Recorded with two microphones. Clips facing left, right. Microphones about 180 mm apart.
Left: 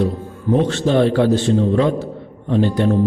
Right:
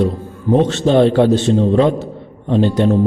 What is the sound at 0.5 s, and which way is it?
A man's voice, 25° right (ahead or behind).